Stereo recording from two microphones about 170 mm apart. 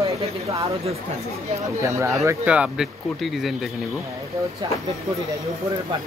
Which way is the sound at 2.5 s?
5° right (ahead or behind).